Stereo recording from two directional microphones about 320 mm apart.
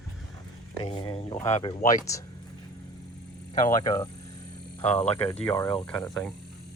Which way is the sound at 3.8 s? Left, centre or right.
Centre.